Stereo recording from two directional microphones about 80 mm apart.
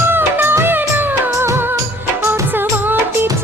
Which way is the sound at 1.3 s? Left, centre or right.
Right.